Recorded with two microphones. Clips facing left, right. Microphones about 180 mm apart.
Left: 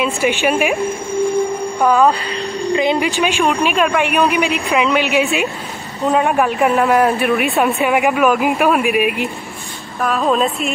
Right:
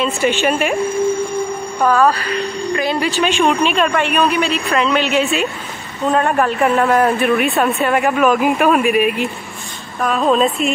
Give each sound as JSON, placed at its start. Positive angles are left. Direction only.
{"t": 0.0, "sound": "speech", "side_deg": 10}
{"t": 1.9, "sound": "speech", "side_deg": 15}